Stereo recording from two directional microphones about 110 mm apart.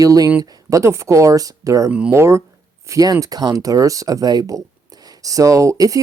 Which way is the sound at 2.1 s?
25° right (ahead or behind).